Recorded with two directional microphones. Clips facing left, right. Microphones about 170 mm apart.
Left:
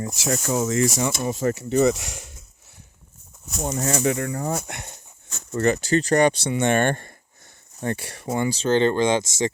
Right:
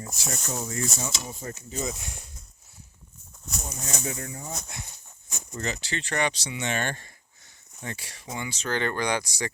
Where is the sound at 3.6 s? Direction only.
75° left (ahead or behind).